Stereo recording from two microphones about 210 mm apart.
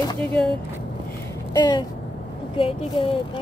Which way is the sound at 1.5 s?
20° left (ahead or behind).